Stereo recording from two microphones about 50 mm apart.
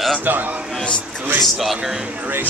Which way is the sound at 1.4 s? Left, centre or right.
Centre.